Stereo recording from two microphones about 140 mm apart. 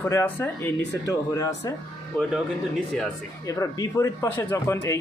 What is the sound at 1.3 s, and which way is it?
Speech, 25° left (ahead or behind).